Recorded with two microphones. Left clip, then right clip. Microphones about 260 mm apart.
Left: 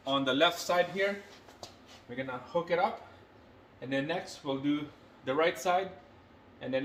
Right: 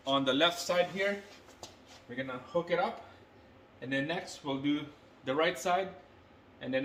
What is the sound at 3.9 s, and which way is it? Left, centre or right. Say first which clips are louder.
A man's voice: left 1 dB; centre.